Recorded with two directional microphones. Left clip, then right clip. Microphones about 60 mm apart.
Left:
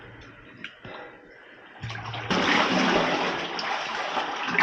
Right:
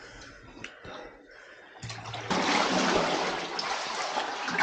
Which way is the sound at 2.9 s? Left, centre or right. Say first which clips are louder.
Left 3 dB; centre.